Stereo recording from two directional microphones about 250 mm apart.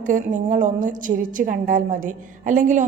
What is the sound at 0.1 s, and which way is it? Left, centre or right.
A woman's voice, right.